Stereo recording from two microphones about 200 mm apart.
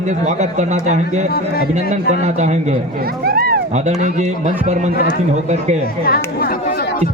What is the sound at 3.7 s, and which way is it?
A man's voice, 35° right (ahead or behind).